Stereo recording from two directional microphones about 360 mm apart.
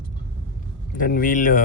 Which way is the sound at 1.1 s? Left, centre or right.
Left.